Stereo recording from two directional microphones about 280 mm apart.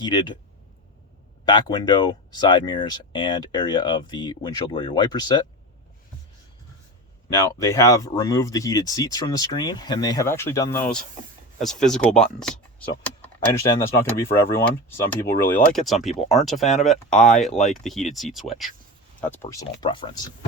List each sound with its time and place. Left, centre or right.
0.0 s speech: centre
1.5 s speech: centre
7.3 s speech: centre
13.7 s speech: centre
19.5 s speech: centre